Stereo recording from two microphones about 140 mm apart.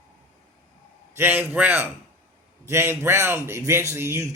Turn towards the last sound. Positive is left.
turn(degrees=-20)  # may be behind; listen again after turning